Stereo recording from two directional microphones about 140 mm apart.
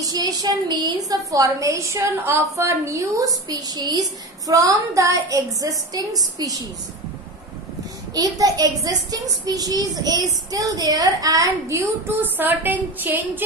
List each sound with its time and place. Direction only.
0.0 s a woman's voice: 25° right (ahead or behind)
8.1 s a woman's voice: 25° right (ahead or behind)